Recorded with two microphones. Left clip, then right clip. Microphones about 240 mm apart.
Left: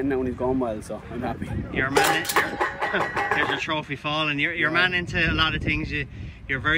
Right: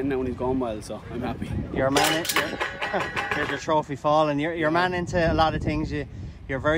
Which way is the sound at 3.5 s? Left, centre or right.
Centre.